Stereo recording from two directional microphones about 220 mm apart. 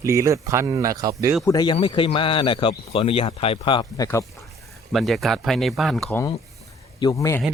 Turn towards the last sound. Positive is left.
turn(degrees=15)  # may be behind; listen again after turning